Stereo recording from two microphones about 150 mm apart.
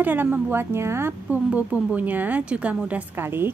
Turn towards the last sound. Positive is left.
turn(degrees=-15)  # may be behind; listen again after turning